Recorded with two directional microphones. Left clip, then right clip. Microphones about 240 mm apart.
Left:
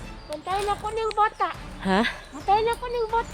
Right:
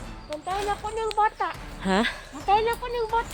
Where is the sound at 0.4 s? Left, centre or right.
Left.